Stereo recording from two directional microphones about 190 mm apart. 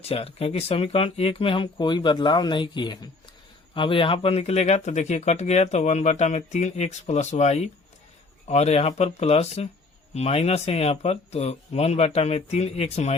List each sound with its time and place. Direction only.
0.0 s speech: 30° left (ahead or behind)